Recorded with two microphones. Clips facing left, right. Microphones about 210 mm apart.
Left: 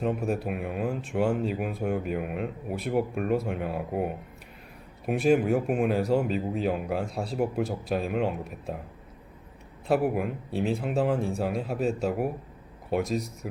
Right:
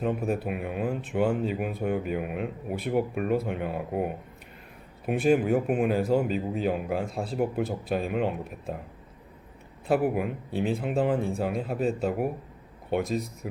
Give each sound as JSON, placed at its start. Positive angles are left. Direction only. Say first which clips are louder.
{"t": 0.0, "sound": "speech", "louder": "even", "side_deg": 0}
{"t": 9.8, "sound": "speech", "louder": "even", "side_deg": 0}